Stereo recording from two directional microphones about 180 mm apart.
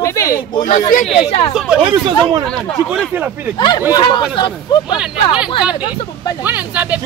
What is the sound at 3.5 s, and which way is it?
Speech, 25° left (ahead or behind).